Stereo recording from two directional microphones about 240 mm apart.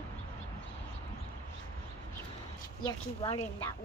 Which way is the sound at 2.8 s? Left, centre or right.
Left.